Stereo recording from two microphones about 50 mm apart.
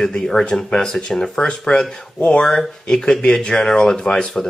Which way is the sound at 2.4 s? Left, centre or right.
Centre.